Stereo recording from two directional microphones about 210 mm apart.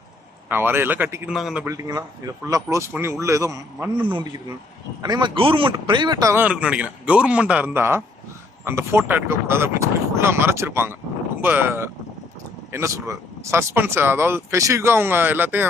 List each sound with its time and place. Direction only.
0.4 s a man's voice: 10° right (ahead or behind)
1.6 s a man's voice: 15° right (ahead or behind)
4.0 s a man's voice: 25° right (ahead or behind)